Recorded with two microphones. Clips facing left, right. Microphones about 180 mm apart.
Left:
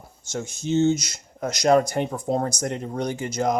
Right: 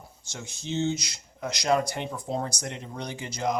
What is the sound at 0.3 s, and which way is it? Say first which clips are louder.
Speech: left 9 dB; 45° left (ahead or behind).